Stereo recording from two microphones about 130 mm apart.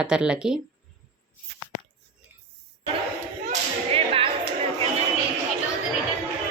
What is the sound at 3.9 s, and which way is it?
Whip, 45° right (ahead or behind).